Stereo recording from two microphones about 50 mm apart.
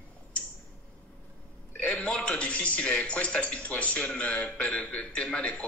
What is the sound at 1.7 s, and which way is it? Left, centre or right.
A man's voice, left.